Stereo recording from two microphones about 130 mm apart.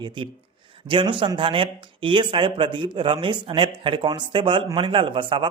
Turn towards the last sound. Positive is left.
turn(degrees=-40)  # may be behind; listen again after turning